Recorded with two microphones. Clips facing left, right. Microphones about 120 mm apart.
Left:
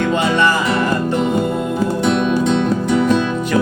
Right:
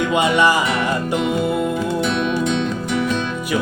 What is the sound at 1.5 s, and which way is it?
Music, 5° right (ahead or behind).